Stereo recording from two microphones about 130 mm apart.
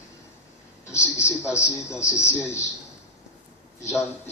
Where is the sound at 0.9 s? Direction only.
20° left (ahead or behind).